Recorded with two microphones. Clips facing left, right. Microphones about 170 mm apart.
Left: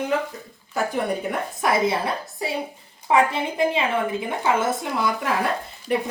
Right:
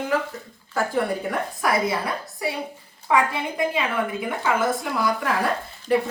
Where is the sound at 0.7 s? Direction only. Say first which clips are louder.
Right 1 dB; 20° left (ahead or behind).